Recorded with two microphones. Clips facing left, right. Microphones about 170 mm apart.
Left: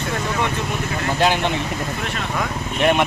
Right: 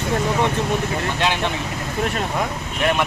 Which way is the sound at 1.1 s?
35° left (ahead or behind).